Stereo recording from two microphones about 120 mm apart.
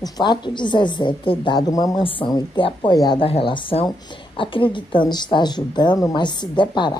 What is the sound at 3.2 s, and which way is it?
A woman's voice, 45° left (ahead or behind).